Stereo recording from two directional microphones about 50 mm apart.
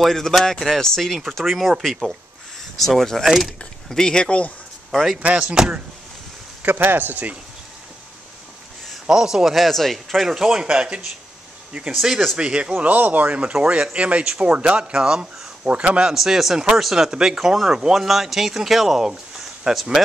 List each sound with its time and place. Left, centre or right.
0.0 s speech: centre; by 4.5 s left
5.4 s speech: centre
6.6 s speech: right
9.0 s speech: centre
10.2 s speech: centre
12.4 s speech: centre
12.7 s speech: right
13.4 s speech: right
15.7 s speech: right
16.1 s speech: centre